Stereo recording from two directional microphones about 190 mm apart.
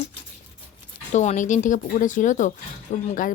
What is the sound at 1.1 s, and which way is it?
A woman's voice, 40° left (ahead or behind).